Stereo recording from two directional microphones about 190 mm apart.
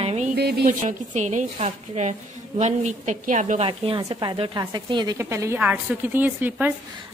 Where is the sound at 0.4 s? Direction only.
60° right (ahead or behind).